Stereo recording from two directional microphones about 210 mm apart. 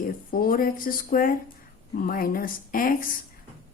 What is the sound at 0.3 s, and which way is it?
Speech, 40° left (ahead or behind).